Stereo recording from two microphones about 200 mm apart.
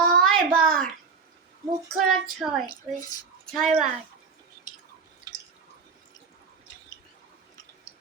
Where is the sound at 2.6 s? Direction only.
20° left (ahead or behind).